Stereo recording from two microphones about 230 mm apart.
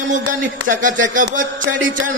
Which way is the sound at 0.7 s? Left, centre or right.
Right.